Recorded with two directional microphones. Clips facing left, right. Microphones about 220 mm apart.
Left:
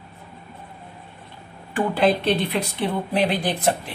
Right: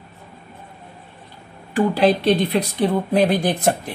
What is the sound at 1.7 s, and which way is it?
Speech, 40° right (ahead or behind).